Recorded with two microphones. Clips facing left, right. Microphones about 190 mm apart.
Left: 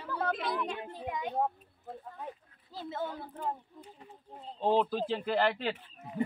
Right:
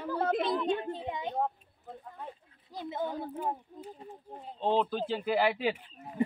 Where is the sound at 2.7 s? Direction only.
15° right (ahead or behind).